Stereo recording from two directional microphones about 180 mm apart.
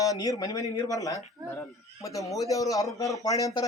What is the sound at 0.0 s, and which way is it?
A man's voice, 20° left (ahead or behind).